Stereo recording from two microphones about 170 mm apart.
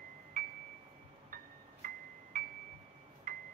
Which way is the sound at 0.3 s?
55° right (ahead or behind).